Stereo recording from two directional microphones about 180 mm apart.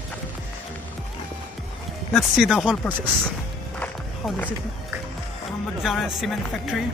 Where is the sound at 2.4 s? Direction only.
5° right (ahead or behind).